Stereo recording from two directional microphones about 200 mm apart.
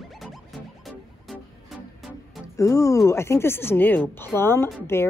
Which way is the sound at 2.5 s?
15° left (ahead or behind).